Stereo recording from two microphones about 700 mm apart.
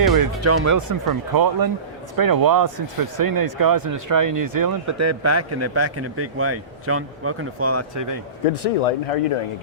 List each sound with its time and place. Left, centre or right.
0.1 s speech: right
8.8 s speech: left